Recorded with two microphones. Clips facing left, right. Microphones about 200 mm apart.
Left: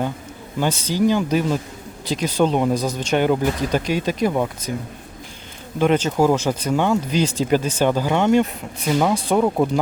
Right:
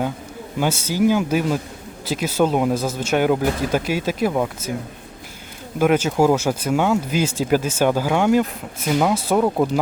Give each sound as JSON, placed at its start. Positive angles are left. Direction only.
{"t": 0.6, "sound": "speech", "side_deg": -10}
{"t": 5.8, "sound": "speech", "side_deg": -10}